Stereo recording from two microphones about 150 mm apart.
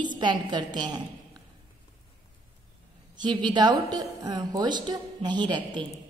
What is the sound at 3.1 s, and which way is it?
A woman's voice, 30° right (ahead or behind).